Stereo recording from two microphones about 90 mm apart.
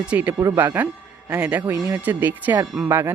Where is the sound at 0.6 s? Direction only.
20° right (ahead or behind).